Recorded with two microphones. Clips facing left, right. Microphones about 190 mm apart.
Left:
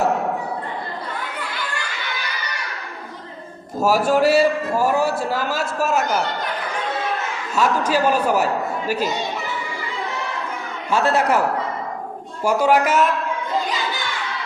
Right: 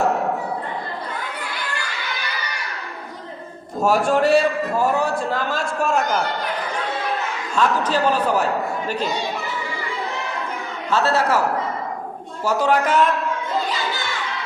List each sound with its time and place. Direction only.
3.8 s a man's voice: 5° left (ahead or behind)
7.5 s a man's voice: 10° left (ahead or behind)
10.9 s a man's voice: 15° left (ahead or behind)
12.5 s a man's voice: 10° left (ahead or behind)